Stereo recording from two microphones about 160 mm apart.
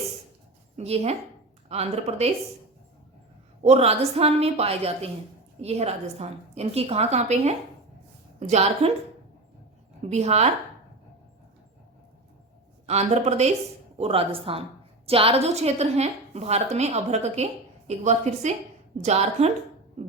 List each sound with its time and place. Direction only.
0.8 s a woman's voice: 40° right (ahead or behind)
3.6 s a woman's voice: 40° right (ahead or behind)
10.0 s a woman's voice: 45° right (ahead or behind)
12.8 s a woman's voice: 45° right (ahead or behind)